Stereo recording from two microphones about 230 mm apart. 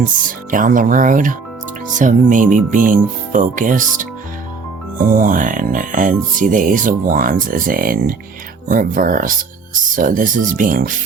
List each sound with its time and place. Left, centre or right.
0.5 s speech: right